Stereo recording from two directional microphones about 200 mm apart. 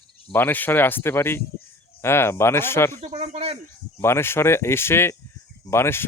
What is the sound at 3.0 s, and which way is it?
Speech, 30° right (ahead or behind).